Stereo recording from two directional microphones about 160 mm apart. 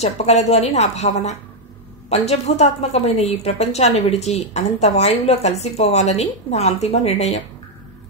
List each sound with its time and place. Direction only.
0.0 s a woman's voice: 40° left (ahead or behind)